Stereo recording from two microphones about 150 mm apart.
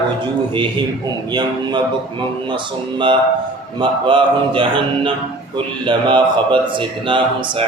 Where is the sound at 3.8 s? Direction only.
35° right (ahead or behind).